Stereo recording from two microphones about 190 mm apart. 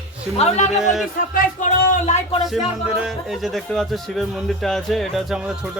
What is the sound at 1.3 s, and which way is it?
Speech, 40° left (ahead or behind).